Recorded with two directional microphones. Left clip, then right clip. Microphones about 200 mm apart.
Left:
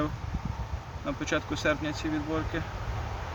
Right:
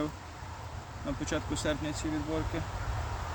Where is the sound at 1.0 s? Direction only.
20° right (ahead or behind).